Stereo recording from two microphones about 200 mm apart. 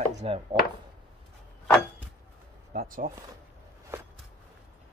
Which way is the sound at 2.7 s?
45° right (ahead or behind).